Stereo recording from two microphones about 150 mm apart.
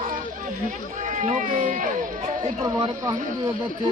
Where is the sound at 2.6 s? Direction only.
30° right (ahead or behind).